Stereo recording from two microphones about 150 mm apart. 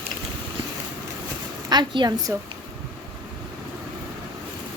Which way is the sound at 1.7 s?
30° right (ahead or behind).